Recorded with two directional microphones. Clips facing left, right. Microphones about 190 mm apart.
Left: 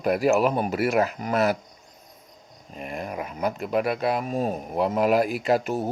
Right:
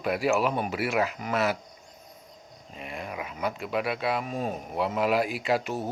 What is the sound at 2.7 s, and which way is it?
Speech, 45° left (ahead or behind).